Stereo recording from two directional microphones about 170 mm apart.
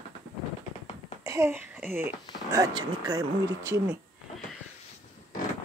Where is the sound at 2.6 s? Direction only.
25° right (ahead or behind).